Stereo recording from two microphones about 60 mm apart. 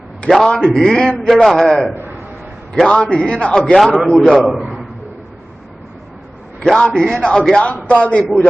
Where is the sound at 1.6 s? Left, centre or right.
Centre.